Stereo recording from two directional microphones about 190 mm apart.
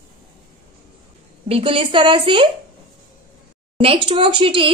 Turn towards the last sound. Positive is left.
turn(degrees=-25)  # may be behind; listen again after turning